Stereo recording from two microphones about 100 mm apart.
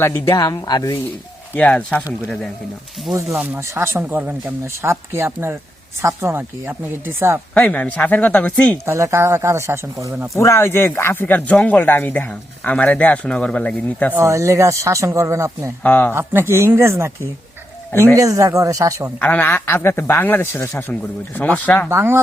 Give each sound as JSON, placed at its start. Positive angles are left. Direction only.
{"t": 0.0, "sound": "speech", "side_deg": 30}
{"t": 1.5, "sound": "speech", "side_deg": 10}
{"t": 3.4, "sound": "a woman's voice", "side_deg": -20}
{"t": 4.7, "sound": "a woman's voice", "side_deg": -25}
{"t": 7.5, "sound": "speech", "side_deg": 15}
{"t": 8.9, "sound": "a woman's voice", "side_deg": -25}
{"t": 10.3, "sound": "speech", "side_deg": 30}
{"t": 14.2, "sound": "speech", "side_deg": -30}
{"t": 15.8, "sound": "a man's voice", "side_deg": 20}
{"t": 16.1, "sound": "a woman's voice", "side_deg": -25}
{"t": 19.2, "sound": "a man's voice", "side_deg": 15}
{"t": 21.8, "sound": "a woman's voice", "side_deg": -25}